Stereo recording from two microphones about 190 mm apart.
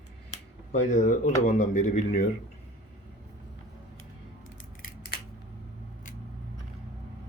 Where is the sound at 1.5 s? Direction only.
40° left (ahead or behind).